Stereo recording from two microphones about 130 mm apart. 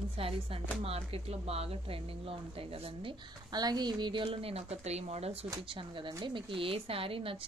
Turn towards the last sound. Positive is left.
turn(degrees=-45)  # may be behind; listen again after turning